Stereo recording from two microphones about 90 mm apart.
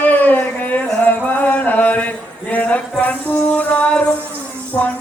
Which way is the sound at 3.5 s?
15° left (ahead or behind).